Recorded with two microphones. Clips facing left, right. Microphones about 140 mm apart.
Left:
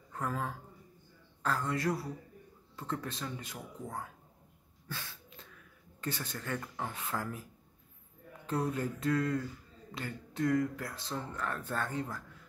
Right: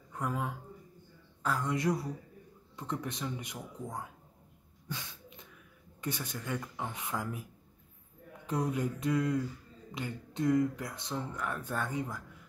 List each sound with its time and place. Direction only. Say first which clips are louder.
0.1 s speech: right 1 dB; 15° right (ahead or behind)
4.8 s a sound: right 2 dB; 15° right (ahead or behind)
5.9 s speech: right 1 dB; 15° right (ahead or behind)
8.5 s speech: right 1 dB; 15° right (ahead or behind)